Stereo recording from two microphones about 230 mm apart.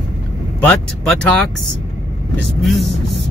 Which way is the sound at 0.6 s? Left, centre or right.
Centre.